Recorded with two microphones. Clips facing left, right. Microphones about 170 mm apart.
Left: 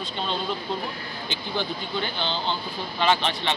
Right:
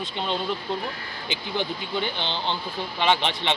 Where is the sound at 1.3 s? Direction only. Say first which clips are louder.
Right 1 dB; 15° right (ahead or behind).